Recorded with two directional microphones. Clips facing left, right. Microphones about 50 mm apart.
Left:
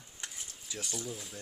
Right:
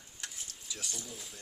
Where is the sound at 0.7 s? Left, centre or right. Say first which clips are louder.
Left 5 dB; centre.